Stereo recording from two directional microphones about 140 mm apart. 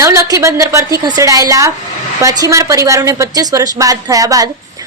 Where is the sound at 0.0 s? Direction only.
20° right (ahead or behind).